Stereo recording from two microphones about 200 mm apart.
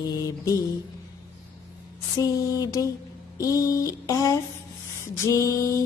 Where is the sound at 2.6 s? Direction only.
20° left (ahead or behind).